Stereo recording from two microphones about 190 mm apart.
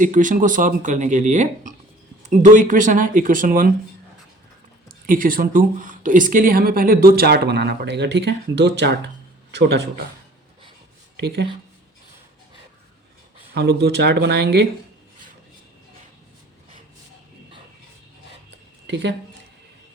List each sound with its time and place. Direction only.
0.0 s speech: 45° right (ahead or behind)
4.9 s speech: 45° right (ahead or behind); by 9.9 s 65° right (ahead or behind)
11.2 s speech: 60° right (ahead or behind)
13.5 s speech: 60° right (ahead or behind)
18.9 s speech: 65° right (ahead or behind)